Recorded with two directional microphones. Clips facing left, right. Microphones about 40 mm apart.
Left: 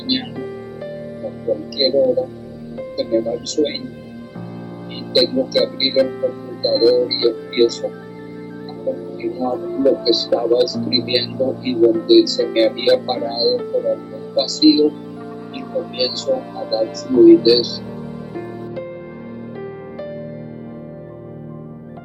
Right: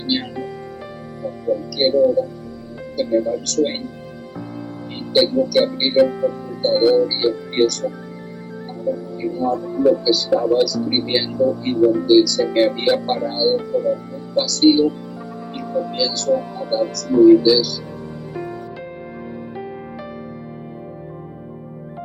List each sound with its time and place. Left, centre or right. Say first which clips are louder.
0.3 s music: left 1 dB; centre
1.5 s speech: even; left
5.1 s speech: right 1 dB; left
6.1 s music: even; centre
7.5 s speech: left 1 dB; left
9.2 s speech: even; left
16.0 s speech: even; left
18.3 s music: left 1 dB; centre